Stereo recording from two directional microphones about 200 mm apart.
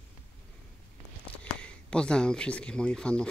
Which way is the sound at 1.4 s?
5° left (ahead or behind).